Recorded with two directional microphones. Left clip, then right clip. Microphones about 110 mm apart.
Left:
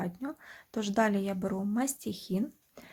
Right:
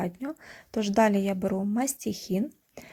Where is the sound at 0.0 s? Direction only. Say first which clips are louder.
Right 4 dB; 30° right (ahead or behind).